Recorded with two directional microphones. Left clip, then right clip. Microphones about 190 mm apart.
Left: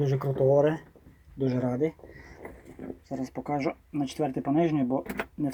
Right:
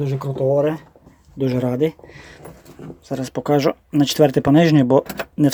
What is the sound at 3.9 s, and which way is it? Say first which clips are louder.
Speech: right 17 dB; 90° right.